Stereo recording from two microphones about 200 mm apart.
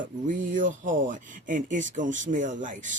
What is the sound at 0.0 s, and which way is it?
A woman's voice, 40° right (ahead or behind).